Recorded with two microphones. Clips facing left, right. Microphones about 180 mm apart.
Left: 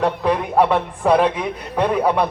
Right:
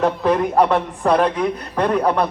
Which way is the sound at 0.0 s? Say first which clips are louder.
Right 2 dB; centre (ahead or behind).